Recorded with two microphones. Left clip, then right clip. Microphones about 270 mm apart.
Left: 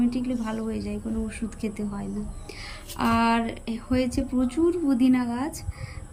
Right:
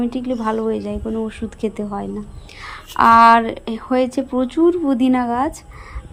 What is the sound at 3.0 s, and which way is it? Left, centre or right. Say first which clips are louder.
Speech: right 14 dB; right.